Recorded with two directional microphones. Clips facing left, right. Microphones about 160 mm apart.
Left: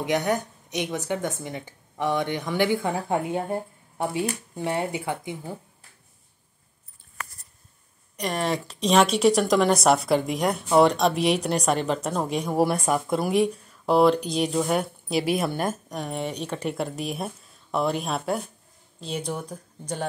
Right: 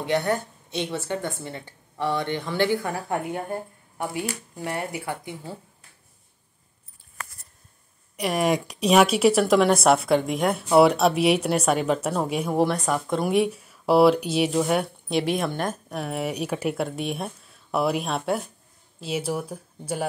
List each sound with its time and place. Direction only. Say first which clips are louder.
0.0 s a woman's voice: even; 15° left (ahead or behind)
8.2 s speech: right 4 dB; 10° right (ahead or behind)
12.5 s speech: left 1 dB; 10° left (ahead or behind); by 20.1 s 5° right (ahead or behind)